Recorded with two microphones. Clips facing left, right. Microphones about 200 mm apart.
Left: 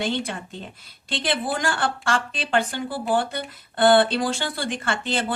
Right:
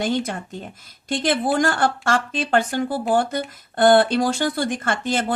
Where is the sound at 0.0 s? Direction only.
45° right (ahead or behind).